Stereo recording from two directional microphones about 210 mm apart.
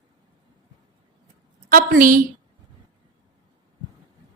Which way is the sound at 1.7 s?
45° right (ahead or behind).